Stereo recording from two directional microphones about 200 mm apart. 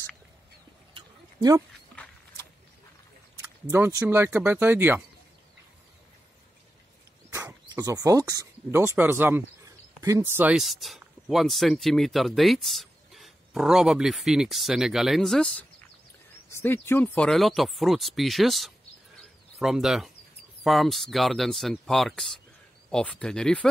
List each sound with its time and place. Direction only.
0.9 s a sound: 20° right (ahead or behind)
3.6 s speech: 10° right (ahead or behind)
7.3 s speech: 15° right (ahead or behind); by 23.7 s 5° left (ahead or behind)